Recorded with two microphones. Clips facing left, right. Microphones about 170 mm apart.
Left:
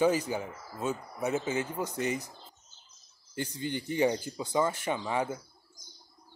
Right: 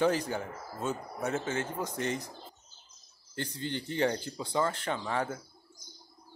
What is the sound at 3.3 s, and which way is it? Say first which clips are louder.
Speech: left 2 dB; 10° left (ahead or behind).